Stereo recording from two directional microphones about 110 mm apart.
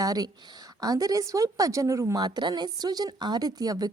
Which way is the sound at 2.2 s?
40° right (ahead or behind).